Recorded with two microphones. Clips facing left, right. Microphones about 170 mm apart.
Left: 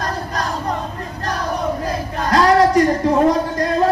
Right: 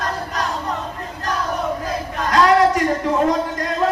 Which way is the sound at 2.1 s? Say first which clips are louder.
Left 1 dB; 35° left (ahead or behind).